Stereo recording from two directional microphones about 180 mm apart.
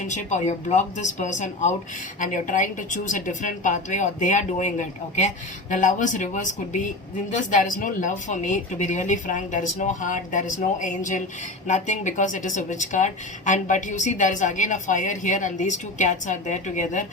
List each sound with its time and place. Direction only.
0.0 s speech: 40° left (ahead or behind)